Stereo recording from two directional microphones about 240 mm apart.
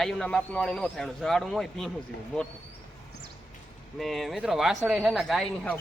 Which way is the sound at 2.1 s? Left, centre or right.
Left.